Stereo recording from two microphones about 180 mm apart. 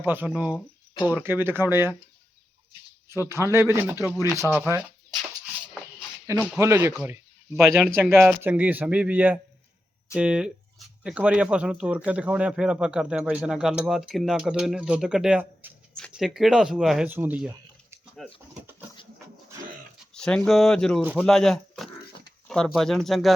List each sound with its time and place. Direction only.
0.0 s speech: 10° right (ahead or behind)
3.2 s speech: 15° right (ahead or behind)
6.6 s speech: 15° right (ahead or behind); by 18.3 s centre (ahead or behind)
20.1 s speech: 5° left (ahead or behind)